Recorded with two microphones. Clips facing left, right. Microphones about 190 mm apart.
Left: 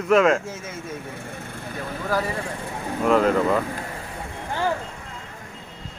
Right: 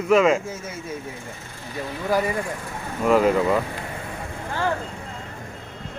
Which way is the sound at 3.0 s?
5° right (ahead or behind).